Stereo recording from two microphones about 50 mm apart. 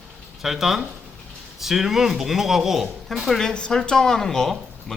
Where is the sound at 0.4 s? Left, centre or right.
Centre.